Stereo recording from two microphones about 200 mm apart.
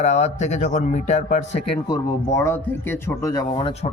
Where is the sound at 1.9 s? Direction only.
15° left (ahead or behind).